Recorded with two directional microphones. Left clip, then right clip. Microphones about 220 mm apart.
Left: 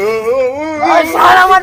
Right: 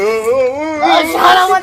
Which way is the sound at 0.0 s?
Centre (ahead or behind).